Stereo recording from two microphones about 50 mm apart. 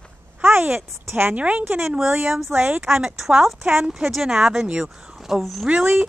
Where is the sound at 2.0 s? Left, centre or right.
Centre.